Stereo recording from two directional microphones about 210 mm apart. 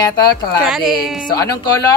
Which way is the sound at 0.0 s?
20° left (ahead or behind).